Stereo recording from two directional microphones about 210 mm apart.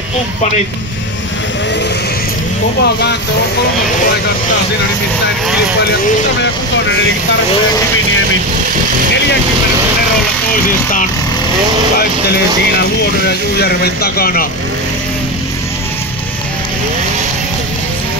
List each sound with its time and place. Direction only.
2.8 s speech: 50° left (ahead or behind)
12.7 s speech: 50° left (ahead or behind)